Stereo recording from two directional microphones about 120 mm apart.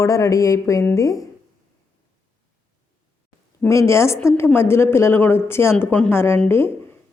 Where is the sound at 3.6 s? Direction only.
25° left (ahead or behind).